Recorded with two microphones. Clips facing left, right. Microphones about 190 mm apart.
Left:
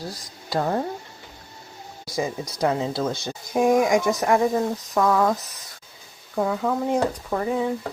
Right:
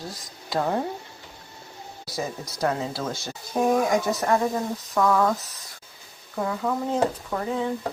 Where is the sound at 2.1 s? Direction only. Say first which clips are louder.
Left 4 dB; 15° left (ahead or behind).